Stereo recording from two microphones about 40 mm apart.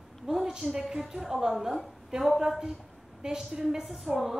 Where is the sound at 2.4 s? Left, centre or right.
Centre.